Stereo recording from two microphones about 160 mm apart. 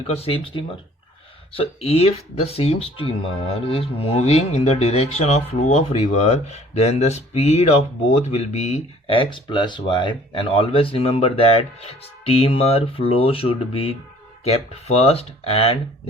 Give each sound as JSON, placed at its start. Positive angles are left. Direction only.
{"t": 0.1, "sound": "speech", "side_deg": 40}